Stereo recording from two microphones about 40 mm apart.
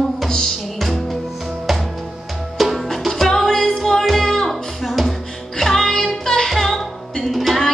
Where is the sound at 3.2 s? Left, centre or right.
Centre.